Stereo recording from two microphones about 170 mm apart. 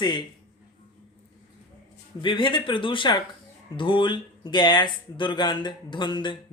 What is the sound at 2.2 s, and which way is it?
Speech, 30° left (ahead or behind).